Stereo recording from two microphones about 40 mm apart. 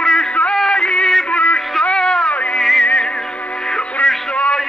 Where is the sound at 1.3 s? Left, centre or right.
Left.